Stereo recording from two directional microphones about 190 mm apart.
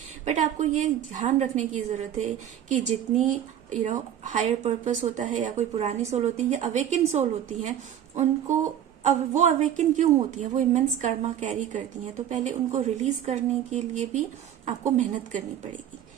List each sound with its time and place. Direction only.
0.3 s a woman's voice: 40° right (ahead or behind)